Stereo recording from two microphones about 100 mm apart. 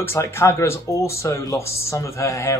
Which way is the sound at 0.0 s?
25° left (ahead or behind).